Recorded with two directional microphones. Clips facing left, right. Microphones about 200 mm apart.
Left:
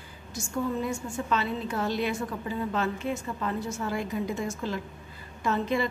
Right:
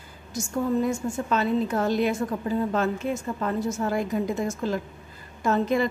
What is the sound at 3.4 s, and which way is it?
A woman's voice, 45° right (ahead or behind).